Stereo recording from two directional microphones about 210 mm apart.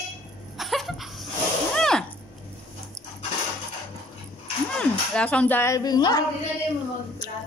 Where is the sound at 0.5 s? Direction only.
Centre (ahead or behind).